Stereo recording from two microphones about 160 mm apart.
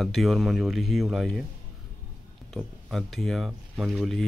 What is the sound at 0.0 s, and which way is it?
Speech, centre (ahead or behind).